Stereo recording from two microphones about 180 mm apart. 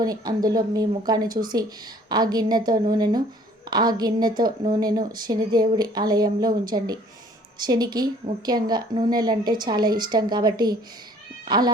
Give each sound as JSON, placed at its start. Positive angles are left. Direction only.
{"t": 0.0, "sound": "a woman's voice", "side_deg": -20}